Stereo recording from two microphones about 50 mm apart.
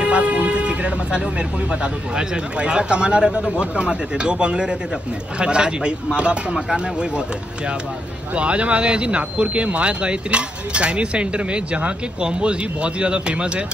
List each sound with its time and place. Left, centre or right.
0.0 s music: right
1.7 s speech: centre
8.4 s speech: right